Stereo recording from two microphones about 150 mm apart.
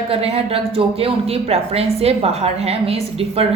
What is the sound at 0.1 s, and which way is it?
Speech, 40° right (ahead or behind).